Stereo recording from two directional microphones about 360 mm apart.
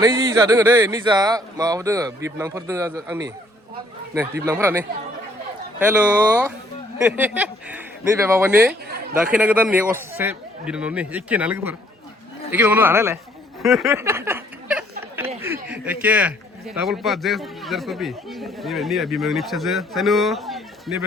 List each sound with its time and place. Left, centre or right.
0.0 s speech: centre
4.4 s speech: centre
5.8 s speech: centre
13.6 s a sound: centre
15.6 s speech: centre